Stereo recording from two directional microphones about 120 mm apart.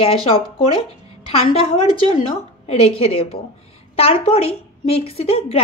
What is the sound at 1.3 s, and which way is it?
Speech, 55° left (ahead or behind).